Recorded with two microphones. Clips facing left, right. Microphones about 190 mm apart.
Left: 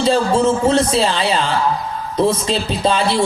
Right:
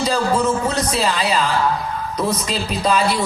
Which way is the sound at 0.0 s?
30° left (ahead or behind).